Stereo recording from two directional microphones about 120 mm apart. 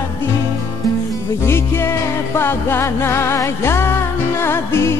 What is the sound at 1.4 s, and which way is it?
Music, 20° left (ahead or behind).